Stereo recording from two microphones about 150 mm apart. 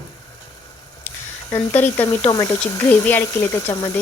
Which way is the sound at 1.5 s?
15° left (ahead or behind).